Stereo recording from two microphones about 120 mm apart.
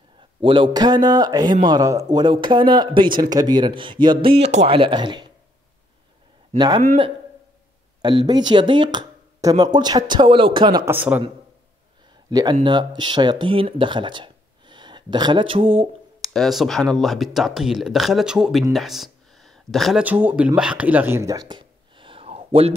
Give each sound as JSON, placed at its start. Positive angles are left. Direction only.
{"t": 0.4, "sound": "speech", "side_deg": -45}
{"t": 0.7, "sound": "speech", "side_deg": -35}
{"t": 4.9, "sound": "speech", "side_deg": -40}
{"t": 8.0, "sound": "speech", "side_deg": -35}
{"t": 9.4, "sound": "speech", "side_deg": -30}
{"t": 10.9, "sound": "a man's voice", "side_deg": -15}
{"t": 12.3, "sound": "speech", "side_deg": -30}
{"t": 16.2, "sound": "speech", "side_deg": 0}
{"t": 20.0, "sound": "speech", "side_deg": -15}